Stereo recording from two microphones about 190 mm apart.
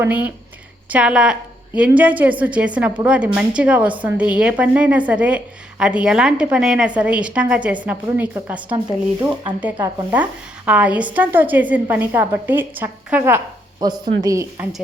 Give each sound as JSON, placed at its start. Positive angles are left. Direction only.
{"t": 0.0, "sound": "a woman's voice", "side_deg": -10}
{"t": 13.7, "sound": "speech", "side_deg": -20}